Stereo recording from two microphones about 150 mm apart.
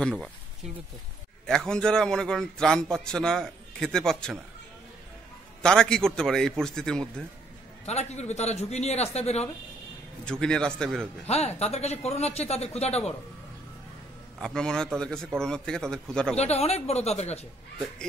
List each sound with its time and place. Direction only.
0.0 s a man's voice: centre (ahead or behind)
1.4 s a man's voice: 5° left (ahead or behind)
5.6 s a man's voice: 5° left (ahead or behind)
7.8 s speech: 45° left (ahead or behind)
10.2 s a man's voice: 5° left (ahead or behind)
11.2 s speech: 45° left (ahead or behind)
14.4 s a man's voice: 5° left (ahead or behind)
16.3 s speech: 45° left (ahead or behind)